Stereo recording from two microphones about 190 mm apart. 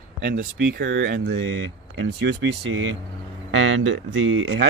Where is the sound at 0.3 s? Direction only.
65° right (ahead or behind).